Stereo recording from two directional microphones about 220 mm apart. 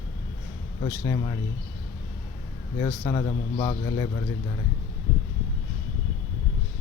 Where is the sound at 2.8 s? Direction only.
20° left (ahead or behind).